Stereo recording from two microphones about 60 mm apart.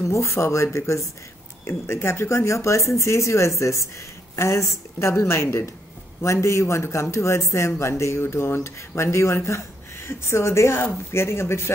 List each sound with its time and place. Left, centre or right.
0.0 s speech: left